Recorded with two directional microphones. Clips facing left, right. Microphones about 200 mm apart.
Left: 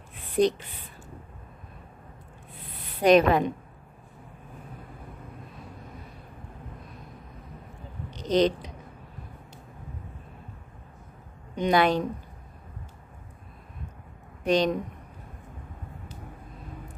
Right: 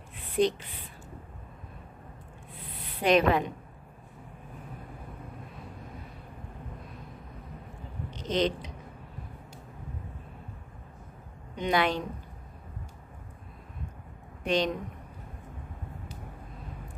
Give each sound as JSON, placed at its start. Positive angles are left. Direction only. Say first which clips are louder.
{"t": 0.4, "sound": "a woman's voice", "louder": "left 3 dB", "side_deg": 40}
{"t": 3.0, "sound": "a woman's voice", "louder": "left 4 dB", "side_deg": 40}
{"t": 8.3, "sound": "a woman's voice", "louder": "left 5 dB", "side_deg": 35}
{"t": 11.5, "sound": "a woman's voice", "louder": "left 5 dB", "side_deg": 40}
{"t": 14.4, "sound": "a woman's voice", "louder": "left 4 dB", "side_deg": 40}